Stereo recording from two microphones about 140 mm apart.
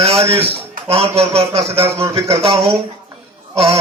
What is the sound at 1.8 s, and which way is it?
Speech, 20° right (ahead or behind).